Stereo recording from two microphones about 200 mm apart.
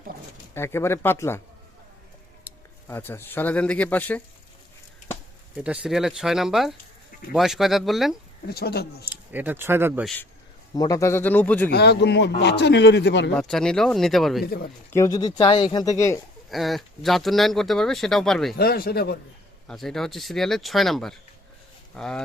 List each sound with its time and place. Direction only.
0.5 s speech: 10° left (ahead or behind)
2.4 s speech: 10° left (ahead or behind)
5.5 s speech: 5° right (ahead or behind)
8.4 s speech: 50° left (ahead or behind)
9.0 s speech: 10° right (ahead or behind)
10.8 s speech: 15° left (ahead or behind)
11.7 s speech: 55° left (ahead or behind)
13.5 s speech: centre (ahead or behind)
14.4 s speech: 50° left (ahead or behind)
14.9 s speech: 15° left (ahead or behind)
16.5 s speech: centre (ahead or behind)
18.5 s speech: 50° left (ahead or behind)
19.6 s speech: centre (ahead or behind)